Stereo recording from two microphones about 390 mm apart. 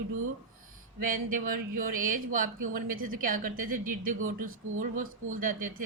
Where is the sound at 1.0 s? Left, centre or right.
Right.